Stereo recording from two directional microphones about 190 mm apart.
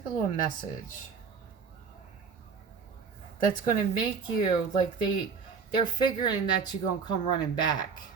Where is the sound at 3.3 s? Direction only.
20° left (ahead or behind).